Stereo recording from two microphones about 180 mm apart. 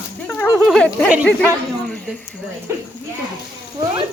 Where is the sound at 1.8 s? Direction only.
5° left (ahead or behind).